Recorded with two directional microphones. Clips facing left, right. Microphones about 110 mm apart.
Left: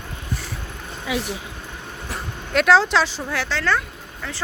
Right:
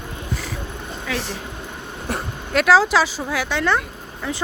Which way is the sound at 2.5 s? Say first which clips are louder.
Right 1 dB; 5° right (ahead or behind).